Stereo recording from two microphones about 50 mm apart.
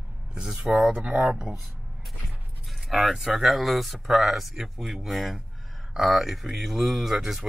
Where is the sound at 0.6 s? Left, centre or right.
Centre.